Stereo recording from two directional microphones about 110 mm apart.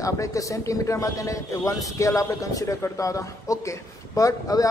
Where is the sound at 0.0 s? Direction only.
30° left (ahead or behind).